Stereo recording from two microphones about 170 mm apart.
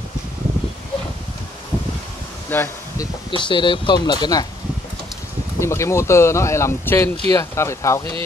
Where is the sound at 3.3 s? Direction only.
30° left (ahead or behind).